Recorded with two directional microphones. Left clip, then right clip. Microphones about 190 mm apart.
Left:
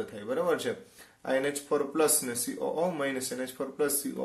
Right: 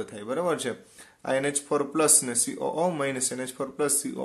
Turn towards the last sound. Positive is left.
turn(degrees=-40)  # may be behind; listen again after turning